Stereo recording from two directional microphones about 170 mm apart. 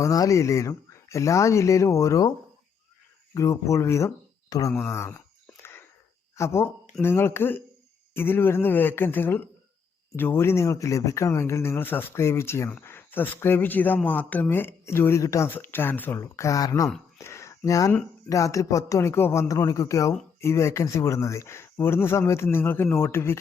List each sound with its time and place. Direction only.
0.0 s speech: 20° left (ahead or behind)
3.3 s speech: 15° left (ahead or behind)
6.3 s speech: 15° left (ahead or behind)
17.2 s a sound: 15° left (ahead or behind)
17.7 s speech: 20° left (ahead or behind)